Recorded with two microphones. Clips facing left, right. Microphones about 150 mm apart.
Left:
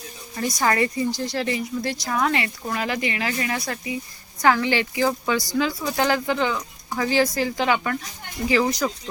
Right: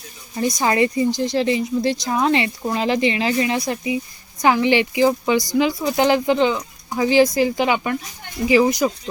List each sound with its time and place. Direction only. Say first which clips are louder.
0.3 s a woman's voice: right 4 dB; 20° right (ahead or behind)